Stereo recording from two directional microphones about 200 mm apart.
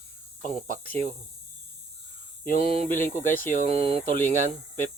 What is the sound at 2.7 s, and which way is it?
Speech, 30° right (ahead or behind).